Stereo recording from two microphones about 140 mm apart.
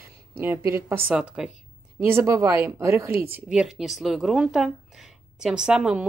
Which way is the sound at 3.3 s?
5° right (ahead or behind).